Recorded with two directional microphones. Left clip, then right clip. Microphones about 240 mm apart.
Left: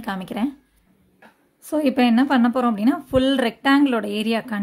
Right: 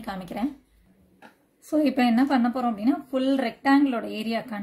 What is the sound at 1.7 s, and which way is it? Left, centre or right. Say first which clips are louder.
A woman's voice: left 3 dB; left.